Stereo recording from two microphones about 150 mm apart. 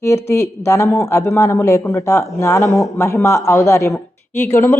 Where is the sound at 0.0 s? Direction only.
20° left (ahead or behind).